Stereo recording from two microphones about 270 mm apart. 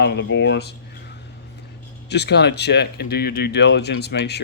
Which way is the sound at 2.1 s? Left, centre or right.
Left.